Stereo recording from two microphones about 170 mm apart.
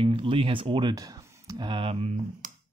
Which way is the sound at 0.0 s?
30° right (ahead or behind).